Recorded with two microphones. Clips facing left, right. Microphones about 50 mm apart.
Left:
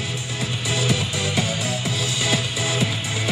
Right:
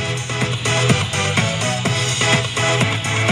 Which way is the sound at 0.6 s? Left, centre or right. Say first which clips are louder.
Right 5 dB; right.